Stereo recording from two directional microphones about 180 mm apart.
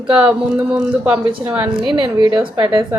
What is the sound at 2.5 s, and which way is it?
Speech, 25° right (ahead or behind).